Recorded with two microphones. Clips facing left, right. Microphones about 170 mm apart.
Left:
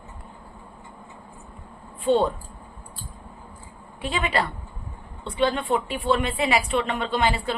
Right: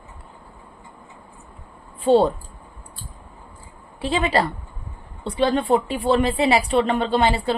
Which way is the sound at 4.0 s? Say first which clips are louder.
Right 5 dB; 35° right (ahead or behind).